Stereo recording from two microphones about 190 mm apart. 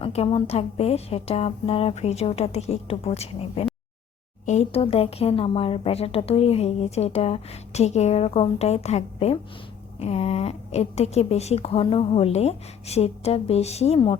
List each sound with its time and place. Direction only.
0.0 s speech: 30° left (ahead or behind)